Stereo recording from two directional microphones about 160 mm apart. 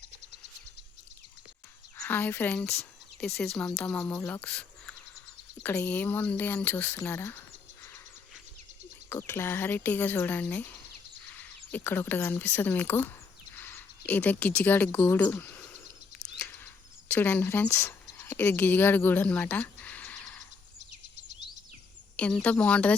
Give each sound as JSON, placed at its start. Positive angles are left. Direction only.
{"t": 2.0, "sound": "speech", "side_deg": 10}
{"t": 9.0, "sound": "speech", "side_deg": 15}
{"t": 17.1, "sound": "speech", "side_deg": 10}
{"t": 20.7, "sound": "a sound", "side_deg": -50}
{"t": 22.1, "sound": "speech", "side_deg": 5}